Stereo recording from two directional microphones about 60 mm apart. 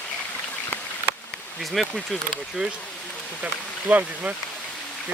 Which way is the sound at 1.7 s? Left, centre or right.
Centre.